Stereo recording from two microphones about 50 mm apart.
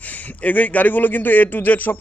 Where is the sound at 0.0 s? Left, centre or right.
Left.